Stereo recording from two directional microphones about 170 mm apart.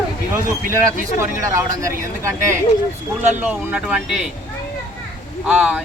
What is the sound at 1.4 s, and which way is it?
Speech, 20° right (ahead or behind).